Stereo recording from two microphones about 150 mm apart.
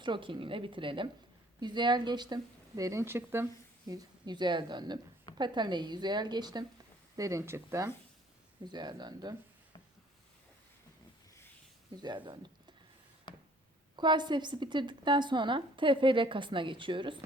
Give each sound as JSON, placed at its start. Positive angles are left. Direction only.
{"t": 0.0, "sound": "speech", "side_deg": -35}
{"t": 8.6, "sound": "speech", "side_deg": -30}
{"t": 11.9, "sound": "speech", "side_deg": -30}
{"t": 13.9, "sound": "speech", "side_deg": -30}